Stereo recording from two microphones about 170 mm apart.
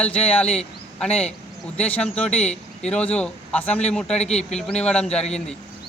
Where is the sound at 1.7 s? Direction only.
10° left (ahead or behind).